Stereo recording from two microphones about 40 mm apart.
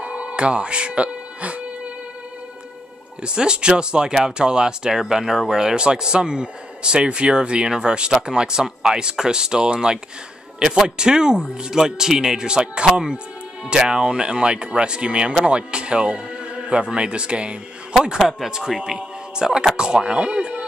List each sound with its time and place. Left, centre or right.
0.0 s insect: right
3.2 s speech: right
11.0 s speech: centre
18.5 s speech: centre